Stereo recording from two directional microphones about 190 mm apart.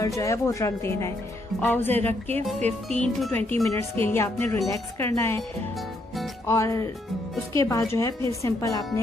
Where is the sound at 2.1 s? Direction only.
35° right (ahead or behind).